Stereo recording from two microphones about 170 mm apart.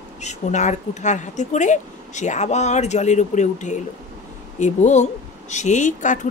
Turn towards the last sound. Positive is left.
turn(degrees=45)  # may be behind; listen again after turning